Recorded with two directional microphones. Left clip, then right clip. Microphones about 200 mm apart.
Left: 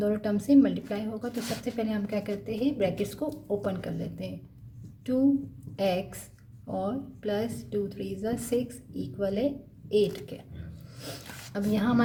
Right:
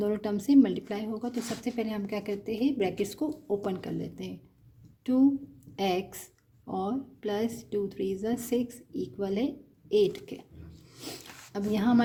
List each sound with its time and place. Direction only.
0.0 s speech: 45° right (ahead or behind)
5.7 s a woman's voice: 50° right (ahead or behind)